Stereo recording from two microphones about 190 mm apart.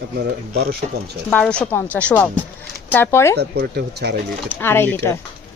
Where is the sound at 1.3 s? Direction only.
5° left (ahead or behind).